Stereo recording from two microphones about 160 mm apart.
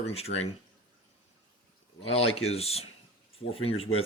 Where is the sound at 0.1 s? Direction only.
40° left (ahead or behind).